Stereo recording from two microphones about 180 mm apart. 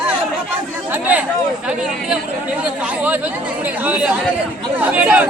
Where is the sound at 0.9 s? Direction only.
10° right (ahead or behind).